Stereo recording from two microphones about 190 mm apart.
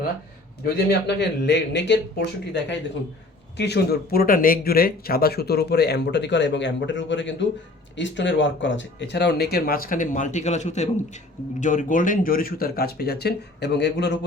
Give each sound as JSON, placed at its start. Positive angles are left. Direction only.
{"t": 0.6, "sound": "speech", "side_deg": 60}